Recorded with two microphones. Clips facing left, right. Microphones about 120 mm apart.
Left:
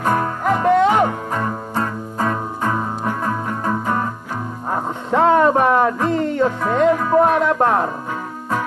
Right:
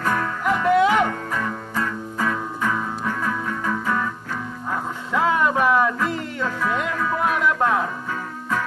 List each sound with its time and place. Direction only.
0.0 s music: 35° left (ahead or behind)